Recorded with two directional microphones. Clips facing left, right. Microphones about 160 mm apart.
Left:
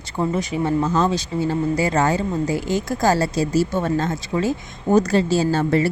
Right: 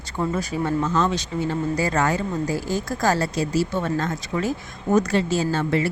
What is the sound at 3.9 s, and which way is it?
Speech, 25° left (ahead or behind).